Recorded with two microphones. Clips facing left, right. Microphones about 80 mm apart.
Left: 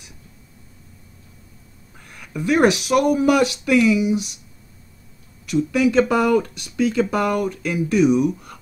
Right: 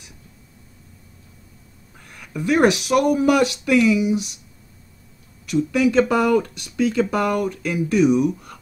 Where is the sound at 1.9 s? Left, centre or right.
Centre.